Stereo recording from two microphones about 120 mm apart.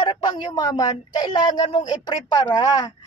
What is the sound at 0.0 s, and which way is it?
A woman's voice, 40° left (ahead or behind).